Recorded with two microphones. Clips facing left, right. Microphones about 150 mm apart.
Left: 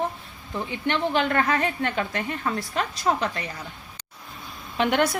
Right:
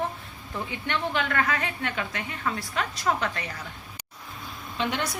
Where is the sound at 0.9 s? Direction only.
30° left (ahead or behind).